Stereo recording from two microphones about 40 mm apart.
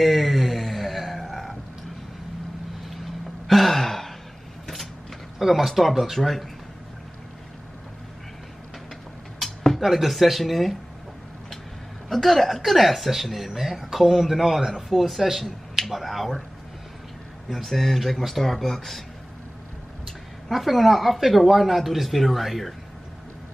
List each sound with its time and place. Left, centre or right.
0.0 s a sound: centre
3.4 s gasp: centre
5.4 s speech: centre
9.4 s a sound: centre
9.8 s speech: centre
12.1 s speech: centre
17.5 s speech: centre
20.1 s speech: centre